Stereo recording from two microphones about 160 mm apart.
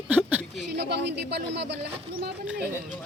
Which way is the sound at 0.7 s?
90° right.